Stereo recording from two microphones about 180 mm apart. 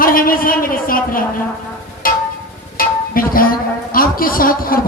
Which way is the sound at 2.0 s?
50° left (ahead or behind).